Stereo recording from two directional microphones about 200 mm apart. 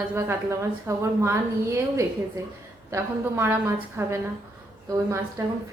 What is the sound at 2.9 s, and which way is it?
A woman's voice, 10° right (ahead or behind).